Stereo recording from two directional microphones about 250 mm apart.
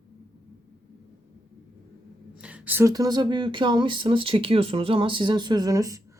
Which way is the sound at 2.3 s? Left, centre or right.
Centre.